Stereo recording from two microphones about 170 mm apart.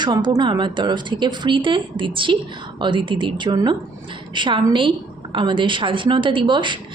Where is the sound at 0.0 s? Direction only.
25° right (ahead or behind).